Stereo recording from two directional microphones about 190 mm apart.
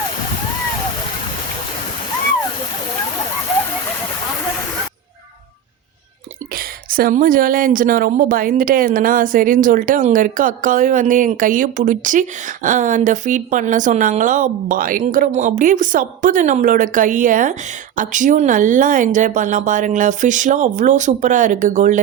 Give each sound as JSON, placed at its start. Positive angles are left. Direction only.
{"t": 6.5, "sound": "speech", "side_deg": -50}